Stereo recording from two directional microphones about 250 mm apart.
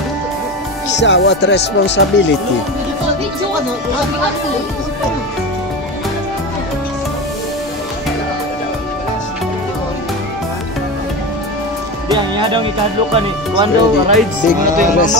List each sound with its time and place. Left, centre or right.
0.9 s music: left
12.1 s speech: centre